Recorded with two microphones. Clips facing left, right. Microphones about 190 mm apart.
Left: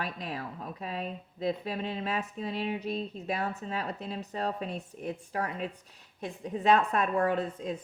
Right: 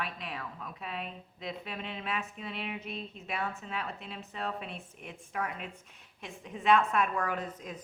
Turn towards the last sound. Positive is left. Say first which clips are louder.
# left 6 dB
turn(degrees=30)  # may be behind; listen again after turning